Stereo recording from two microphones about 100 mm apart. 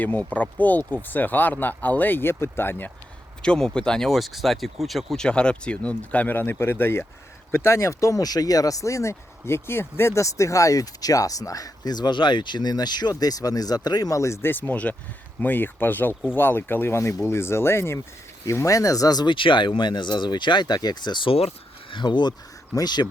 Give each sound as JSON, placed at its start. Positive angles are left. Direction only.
{"t": 0.0, "sound": "speech", "side_deg": 15}
{"t": 3.4, "sound": "speech", "side_deg": 10}
{"t": 21.3, "sound": "a sound", "side_deg": 90}
{"t": 21.9, "sound": "speech", "side_deg": 50}